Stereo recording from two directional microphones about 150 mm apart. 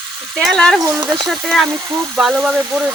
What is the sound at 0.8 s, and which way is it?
Speech, 25° right (ahead or behind).